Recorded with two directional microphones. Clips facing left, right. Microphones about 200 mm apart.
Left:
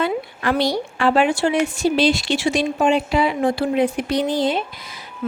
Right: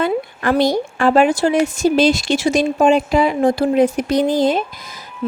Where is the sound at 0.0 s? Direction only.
50° right (ahead or behind).